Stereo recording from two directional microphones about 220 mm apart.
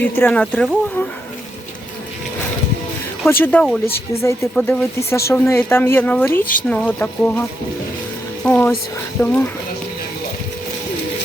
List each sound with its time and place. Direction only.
0.0 s speech: 10° left (ahead or behind)
3.2 s speech: 10° left (ahead or behind)
6.4 s speech: 40° left (ahead or behind)
6.7 s speech: 5° left (ahead or behind)
8.4 s speech: 5° left (ahead or behind)